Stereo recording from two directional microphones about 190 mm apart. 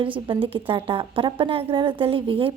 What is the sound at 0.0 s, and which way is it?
Speech, 25° right (ahead or behind).